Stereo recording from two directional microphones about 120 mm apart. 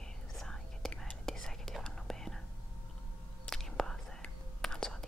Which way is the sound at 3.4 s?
5° left (ahead or behind).